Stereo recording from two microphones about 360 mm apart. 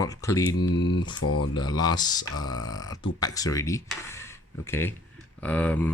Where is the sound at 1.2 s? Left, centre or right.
Left.